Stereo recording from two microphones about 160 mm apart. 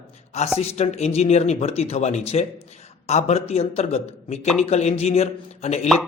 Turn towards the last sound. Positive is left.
turn(degrees=45)  # may be behind; listen again after turning